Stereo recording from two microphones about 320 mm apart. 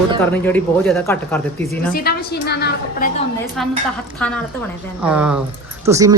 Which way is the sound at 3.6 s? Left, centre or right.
Centre.